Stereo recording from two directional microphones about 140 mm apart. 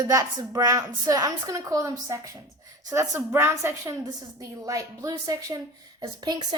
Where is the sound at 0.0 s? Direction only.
25° right (ahead or behind).